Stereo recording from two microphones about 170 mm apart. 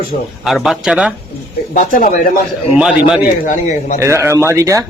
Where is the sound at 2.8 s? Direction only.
5° right (ahead or behind).